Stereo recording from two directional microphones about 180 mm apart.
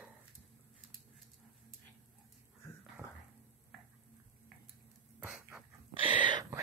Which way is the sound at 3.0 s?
15° right (ahead or behind).